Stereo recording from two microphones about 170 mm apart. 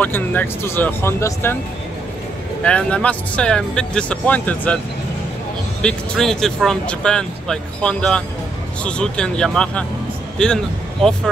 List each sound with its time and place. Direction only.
0.0 s speech: 10° left (ahead or behind)
2.6 s speech: 5° left (ahead or behind)
5.8 s speech: 5° left (ahead or behind)